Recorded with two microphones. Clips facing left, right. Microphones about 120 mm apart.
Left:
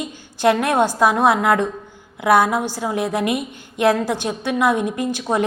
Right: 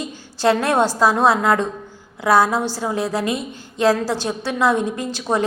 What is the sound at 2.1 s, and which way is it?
A woman's voice, 20° left (ahead or behind).